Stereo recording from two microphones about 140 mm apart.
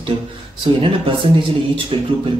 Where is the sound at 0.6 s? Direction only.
40° right (ahead or behind).